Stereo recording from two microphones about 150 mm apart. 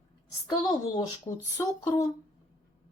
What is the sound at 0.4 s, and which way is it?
Speech, 25° left (ahead or behind).